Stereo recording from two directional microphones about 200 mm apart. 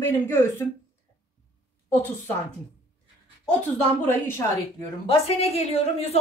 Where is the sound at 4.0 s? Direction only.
10° left (ahead or behind).